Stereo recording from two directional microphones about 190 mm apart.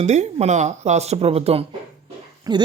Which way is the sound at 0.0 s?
35° right (ahead or behind).